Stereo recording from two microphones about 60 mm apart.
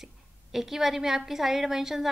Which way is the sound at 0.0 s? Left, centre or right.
Centre.